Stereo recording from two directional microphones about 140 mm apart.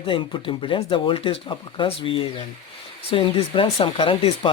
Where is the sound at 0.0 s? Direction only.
40° left (ahead or behind).